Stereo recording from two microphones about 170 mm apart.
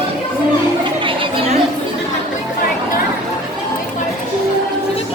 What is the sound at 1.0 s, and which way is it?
Chatter, 30° right (ahead or behind).